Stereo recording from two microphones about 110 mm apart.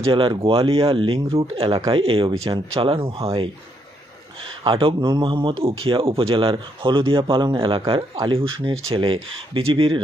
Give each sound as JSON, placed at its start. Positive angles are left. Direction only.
{"t": 0.0, "sound": "speech", "side_deg": -50}
{"t": 4.6, "sound": "speech", "side_deg": -50}